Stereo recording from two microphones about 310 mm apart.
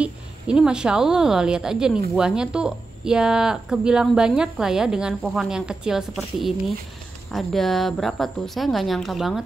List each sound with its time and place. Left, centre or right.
0.0 s a woman's voice: centre